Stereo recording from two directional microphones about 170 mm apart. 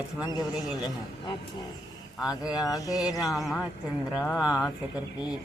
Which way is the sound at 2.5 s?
20° left (ahead or behind).